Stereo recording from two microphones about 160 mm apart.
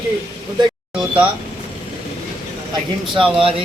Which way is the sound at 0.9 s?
5° right (ahead or behind).